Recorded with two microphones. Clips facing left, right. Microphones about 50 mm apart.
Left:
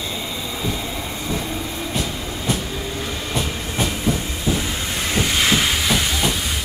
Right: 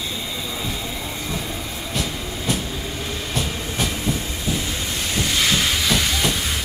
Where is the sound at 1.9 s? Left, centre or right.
Centre.